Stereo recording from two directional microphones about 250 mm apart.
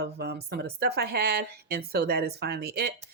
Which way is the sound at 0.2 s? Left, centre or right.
Right.